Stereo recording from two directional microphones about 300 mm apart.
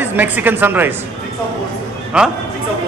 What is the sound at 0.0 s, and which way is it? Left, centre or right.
Speech, centre.